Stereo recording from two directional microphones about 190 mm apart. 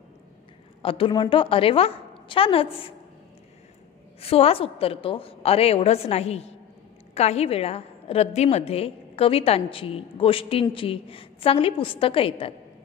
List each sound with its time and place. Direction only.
0.8 s a woman's voice: 30° left (ahead or behind)
4.2 s a woman's voice: 30° left (ahead or behind)